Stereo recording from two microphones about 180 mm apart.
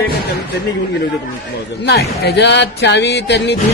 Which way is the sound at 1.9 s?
65° left (ahead or behind).